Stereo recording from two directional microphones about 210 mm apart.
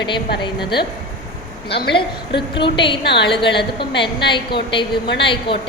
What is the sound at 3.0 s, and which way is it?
Speech, 55° left (ahead or behind).